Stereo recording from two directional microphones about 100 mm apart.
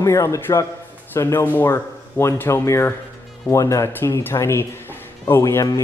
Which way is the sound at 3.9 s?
20° left (ahead or behind).